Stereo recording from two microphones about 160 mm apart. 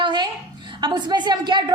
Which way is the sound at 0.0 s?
30° right (ahead or behind).